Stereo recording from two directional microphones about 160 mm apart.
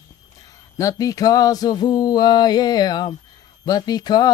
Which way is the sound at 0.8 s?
20° left (ahead or behind).